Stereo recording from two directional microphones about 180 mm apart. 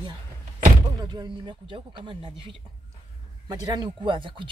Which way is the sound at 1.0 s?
25° right (ahead or behind).